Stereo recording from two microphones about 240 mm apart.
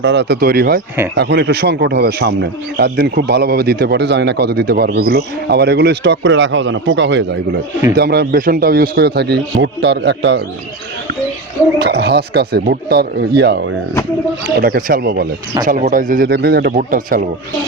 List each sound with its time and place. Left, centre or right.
0.0 s a man's voice: right
11.8 s a man's voice: right